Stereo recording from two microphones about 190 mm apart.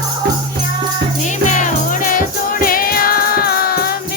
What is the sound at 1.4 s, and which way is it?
Music, 40° left (ahead or behind).